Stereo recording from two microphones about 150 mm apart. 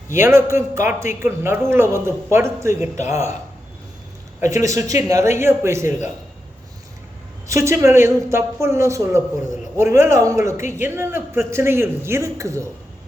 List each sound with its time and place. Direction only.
0.1 s a woman's voice: 15° right (ahead or behind)
4.4 s a man's voice: 20° right (ahead or behind)
7.4 s a woman's voice: 20° right (ahead or behind)